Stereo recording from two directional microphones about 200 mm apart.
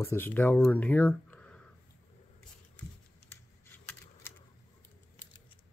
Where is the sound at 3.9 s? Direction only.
10° left (ahead or behind).